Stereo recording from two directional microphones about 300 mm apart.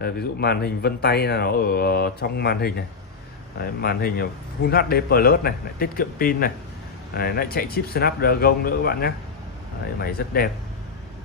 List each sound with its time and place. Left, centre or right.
0.0 s speech: left